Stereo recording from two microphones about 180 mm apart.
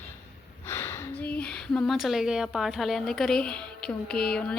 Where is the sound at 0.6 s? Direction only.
15° left (ahead or behind).